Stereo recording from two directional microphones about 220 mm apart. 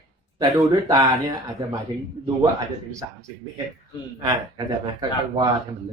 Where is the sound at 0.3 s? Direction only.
15° right (ahead or behind).